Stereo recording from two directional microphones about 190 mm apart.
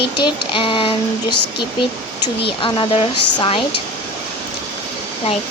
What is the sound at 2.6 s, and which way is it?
Speech, 30° left (ahead or behind).